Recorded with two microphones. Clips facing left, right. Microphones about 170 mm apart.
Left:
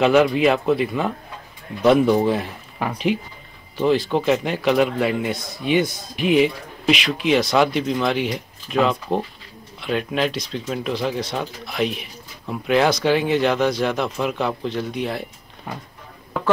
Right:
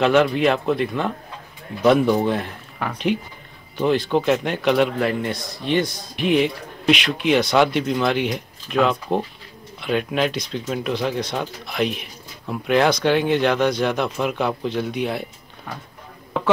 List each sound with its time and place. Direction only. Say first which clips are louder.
0.0 s a man's voice: left 1 dB; 5° left (ahead or behind)